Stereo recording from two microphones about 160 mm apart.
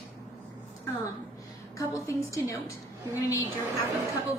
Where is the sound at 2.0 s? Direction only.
20° left (ahead or behind).